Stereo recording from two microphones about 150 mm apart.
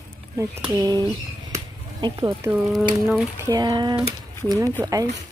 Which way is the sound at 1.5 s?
30° right (ahead or behind).